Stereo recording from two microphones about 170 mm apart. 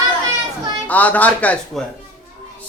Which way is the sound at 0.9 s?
10° left (ahead or behind).